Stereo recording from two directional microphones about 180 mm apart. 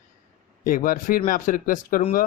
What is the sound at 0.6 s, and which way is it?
Speech, 50° left (ahead or behind).